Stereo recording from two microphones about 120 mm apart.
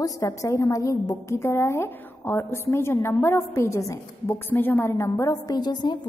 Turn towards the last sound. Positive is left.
turn(degrees=35)  # may be behind; listen again after turning